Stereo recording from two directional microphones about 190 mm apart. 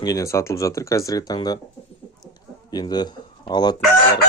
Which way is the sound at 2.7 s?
20° left (ahead or behind).